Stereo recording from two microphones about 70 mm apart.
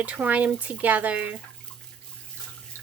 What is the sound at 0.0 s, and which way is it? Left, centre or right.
Speech, right.